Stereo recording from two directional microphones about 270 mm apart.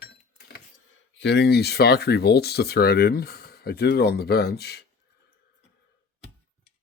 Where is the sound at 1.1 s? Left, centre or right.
Left.